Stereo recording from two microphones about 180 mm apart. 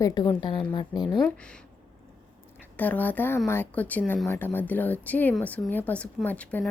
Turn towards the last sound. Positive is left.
turn(degrees=10)  # may be behind; listen again after turning